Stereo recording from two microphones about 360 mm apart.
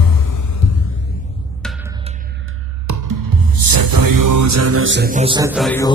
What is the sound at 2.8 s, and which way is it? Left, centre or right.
Music, right.